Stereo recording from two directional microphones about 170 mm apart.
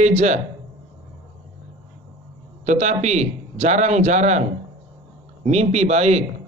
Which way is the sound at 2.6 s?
45° right (ahead or behind).